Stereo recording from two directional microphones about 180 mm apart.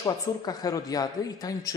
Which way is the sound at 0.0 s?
20° left (ahead or behind).